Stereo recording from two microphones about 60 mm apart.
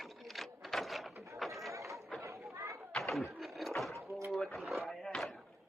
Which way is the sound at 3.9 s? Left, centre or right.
Right.